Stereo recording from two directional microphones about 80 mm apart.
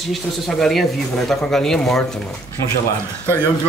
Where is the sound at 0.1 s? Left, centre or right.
Centre.